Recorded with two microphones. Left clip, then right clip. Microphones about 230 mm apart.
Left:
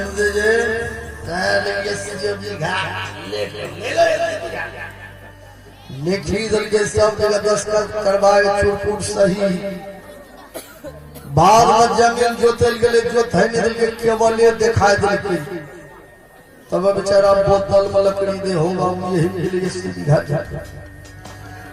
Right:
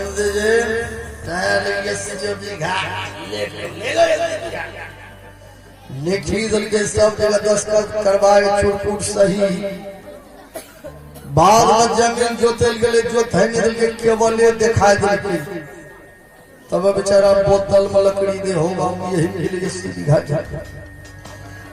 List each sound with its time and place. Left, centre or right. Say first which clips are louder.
0.2 s music: left 1 dB; right
3.2 s a man's voice: even; right
6.1 s a man's voice: even; right
11.3 s a man's voice: even; right
16.6 s a man's voice: right 1 dB; right